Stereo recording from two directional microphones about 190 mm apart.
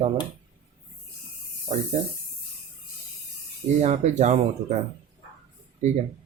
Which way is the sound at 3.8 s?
35° right (ahead or behind).